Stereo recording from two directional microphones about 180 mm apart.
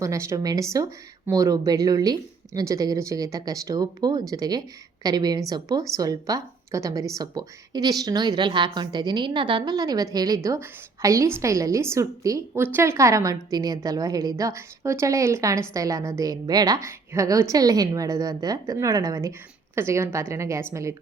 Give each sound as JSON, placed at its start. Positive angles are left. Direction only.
{"t": 0.0, "sound": "a woman's voice", "side_deg": -15}